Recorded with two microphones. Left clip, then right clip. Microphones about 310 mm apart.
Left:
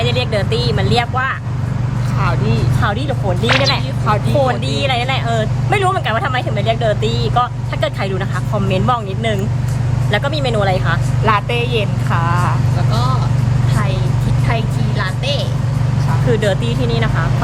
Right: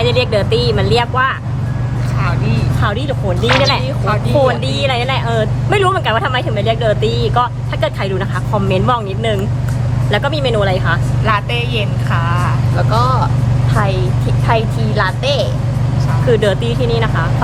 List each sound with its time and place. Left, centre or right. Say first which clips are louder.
0.0 s speech: right 4 dB; centre
2.8 s speech: right 1 dB; centre
11.3 s speech: left 1 dB; centre
12.9 s speech: right 6 dB; centre
14.4 s speech: right 7 dB; centre